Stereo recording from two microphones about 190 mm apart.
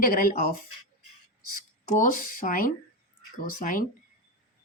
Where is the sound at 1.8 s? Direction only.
45° left (ahead or behind).